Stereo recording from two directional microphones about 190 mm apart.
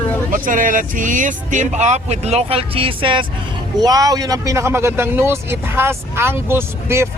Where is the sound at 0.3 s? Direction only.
45° right (ahead or behind).